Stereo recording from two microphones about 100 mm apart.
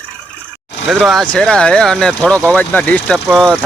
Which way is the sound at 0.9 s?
Centre (ahead or behind).